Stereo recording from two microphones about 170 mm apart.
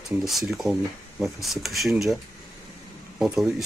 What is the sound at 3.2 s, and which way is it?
Speech, centre (ahead or behind).